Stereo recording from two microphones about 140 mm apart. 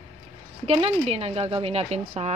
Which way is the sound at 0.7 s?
45° right (ahead or behind).